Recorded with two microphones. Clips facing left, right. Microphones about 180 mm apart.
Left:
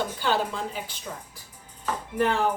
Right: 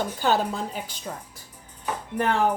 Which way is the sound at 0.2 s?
45° right (ahead or behind).